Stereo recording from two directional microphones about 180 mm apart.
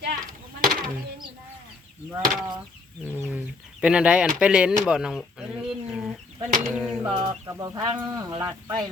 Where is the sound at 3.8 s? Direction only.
5° right (ahead or behind).